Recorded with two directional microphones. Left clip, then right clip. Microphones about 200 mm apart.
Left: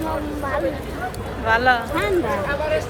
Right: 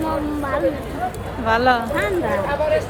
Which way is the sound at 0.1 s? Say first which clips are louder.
Right 2 dB; 50° right (ahead or behind).